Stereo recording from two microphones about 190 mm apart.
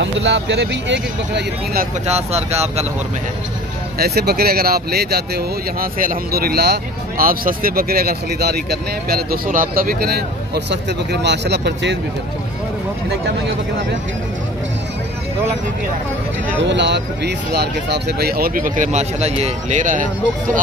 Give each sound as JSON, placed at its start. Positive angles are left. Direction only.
{"t": 0.0, "sound": "speech", "side_deg": -70}
{"t": 2.0, "sound": "speech", "side_deg": -35}
{"t": 4.0, "sound": "speech", "side_deg": -55}
{"t": 16.6, "sound": "speech", "side_deg": -65}